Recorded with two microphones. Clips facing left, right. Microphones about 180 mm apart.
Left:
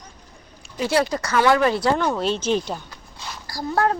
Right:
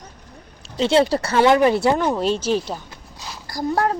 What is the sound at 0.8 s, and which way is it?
Speech, 25° right (ahead or behind).